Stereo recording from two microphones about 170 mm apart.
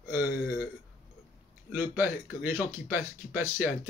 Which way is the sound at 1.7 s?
10° right (ahead or behind).